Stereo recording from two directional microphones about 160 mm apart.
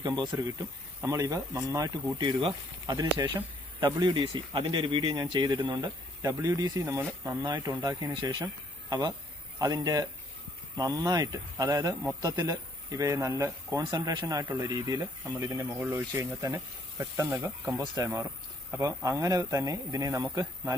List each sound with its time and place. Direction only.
0.0 s speech: 25° right (ahead or behind)